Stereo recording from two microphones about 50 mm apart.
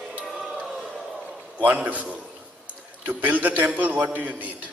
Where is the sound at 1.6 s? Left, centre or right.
Right.